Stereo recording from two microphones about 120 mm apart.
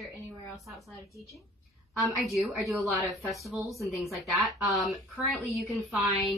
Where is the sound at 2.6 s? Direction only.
Centre (ahead or behind).